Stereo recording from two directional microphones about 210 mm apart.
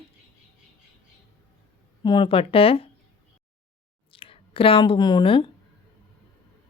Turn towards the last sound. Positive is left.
turn(degrees=25)  # may be behind; listen again after turning